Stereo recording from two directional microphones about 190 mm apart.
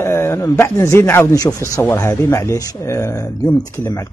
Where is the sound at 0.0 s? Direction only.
15° left (ahead or behind).